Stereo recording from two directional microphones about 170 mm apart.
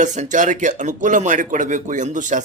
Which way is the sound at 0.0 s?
45° right (ahead or behind).